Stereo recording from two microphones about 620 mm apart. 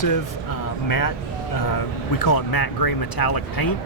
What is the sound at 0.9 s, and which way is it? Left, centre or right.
Speech, left.